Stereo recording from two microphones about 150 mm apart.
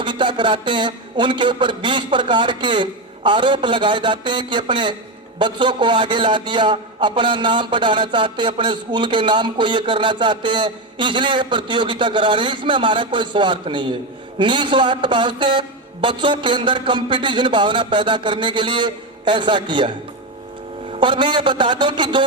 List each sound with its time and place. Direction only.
0.0 s a man's voice: 30° right (ahead or behind)
20.9 s a man's voice: 35° right (ahead or behind)